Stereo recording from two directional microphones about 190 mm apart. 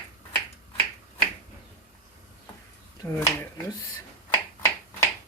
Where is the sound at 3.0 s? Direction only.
15° left (ahead or behind).